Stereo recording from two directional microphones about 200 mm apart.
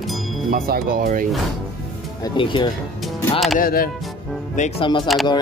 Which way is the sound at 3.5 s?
45° left (ahead or behind).